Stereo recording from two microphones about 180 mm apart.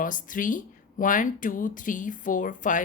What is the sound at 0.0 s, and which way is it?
Speech, 50° left (ahead or behind).